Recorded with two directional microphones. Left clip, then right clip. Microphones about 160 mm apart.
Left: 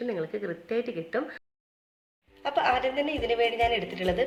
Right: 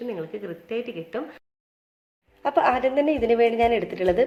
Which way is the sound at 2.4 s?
45° right (ahead or behind).